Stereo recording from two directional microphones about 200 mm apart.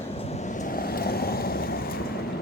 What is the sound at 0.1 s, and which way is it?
Vehicle, 30° left (ahead or behind).